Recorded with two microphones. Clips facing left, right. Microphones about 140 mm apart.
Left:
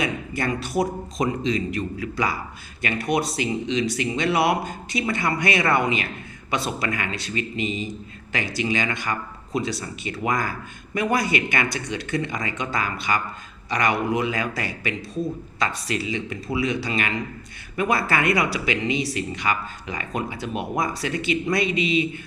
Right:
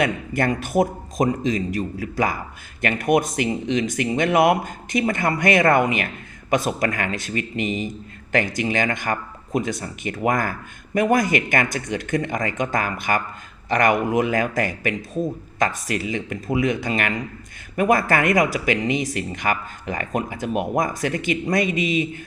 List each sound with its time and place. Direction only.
0.0 s speech: 55° right (ahead or behind)